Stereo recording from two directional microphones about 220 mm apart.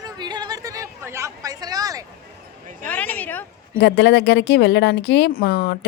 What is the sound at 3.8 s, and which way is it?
Speech, 50° left (ahead or behind).